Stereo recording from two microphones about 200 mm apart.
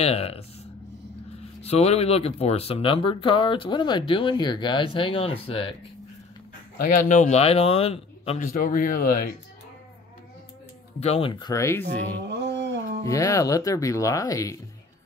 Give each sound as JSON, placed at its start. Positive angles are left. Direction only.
{"t": 0.0, "sound": "speech", "side_deg": 30}
{"t": 1.6, "sound": "speech", "side_deg": 30}
{"t": 6.8, "sound": "speech", "side_deg": 40}
{"t": 8.4, "sound": "speech", "side_deg": 40}
{"t": 11.0, "sound": "speech", "side_deg": 30}
{"t": 12.2, "sound": "a sound", "side_deg": -60}
{"t": 13.0, "sound": "speech", "side_deg": 15}